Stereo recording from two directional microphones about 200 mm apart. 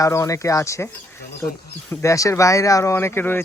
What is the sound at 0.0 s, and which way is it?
Speech, 15° left (ahead or behind).